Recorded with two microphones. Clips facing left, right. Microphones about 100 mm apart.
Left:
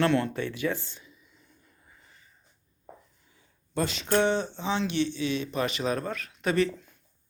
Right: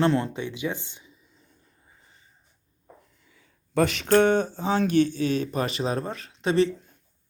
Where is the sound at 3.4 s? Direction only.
70° right (ahead or behind); by 6.7 s 30° right (ahead or behind).